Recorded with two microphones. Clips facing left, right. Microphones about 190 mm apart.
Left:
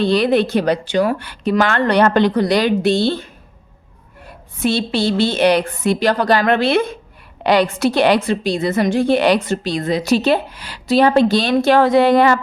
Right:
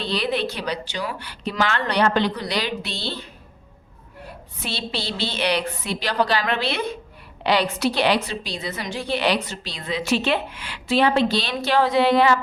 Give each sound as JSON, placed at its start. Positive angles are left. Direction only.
{"t": 0.0, "sound": "a woman's voice", "side_deg": 50}
{"t": 4.5, "sound": "a woman's voice", "side_deg": 50}